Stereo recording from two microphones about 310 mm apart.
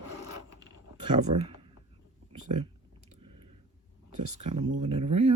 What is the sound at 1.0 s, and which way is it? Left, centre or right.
Speech, centre.